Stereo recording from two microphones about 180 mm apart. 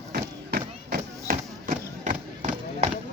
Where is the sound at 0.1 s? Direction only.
55° right (ahead or behind).